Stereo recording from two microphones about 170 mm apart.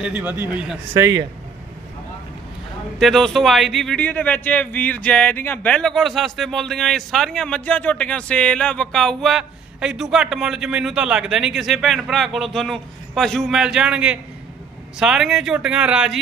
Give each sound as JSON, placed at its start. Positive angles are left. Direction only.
{"t": 0.0, "sound": "a man's voice", "side_deg": -10}
{"t": 3.0, "sound": "speech", "side_deg": 0}